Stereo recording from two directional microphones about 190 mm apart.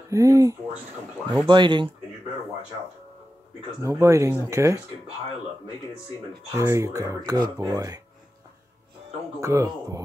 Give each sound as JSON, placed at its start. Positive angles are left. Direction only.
{"t": 0.1, "sound": "speech", "side_deg": -15}
{"t": 3.8, "sound": "speech", "side_deg": -15}
{"t": 6.5, "sound": "speech", "side_deg": -15}
{"t": 9.4, "sound": "speech", "side_deg": -15}